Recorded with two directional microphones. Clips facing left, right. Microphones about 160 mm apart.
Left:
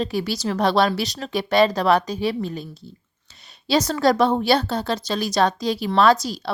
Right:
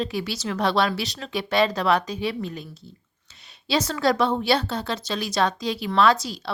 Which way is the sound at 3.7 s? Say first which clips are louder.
Left 4 dB; 40° left (ahead or behind).